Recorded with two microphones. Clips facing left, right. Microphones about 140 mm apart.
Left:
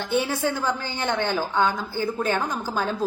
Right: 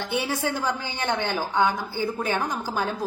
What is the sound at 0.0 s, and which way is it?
A woman's voice, 15° right (ahead or behind).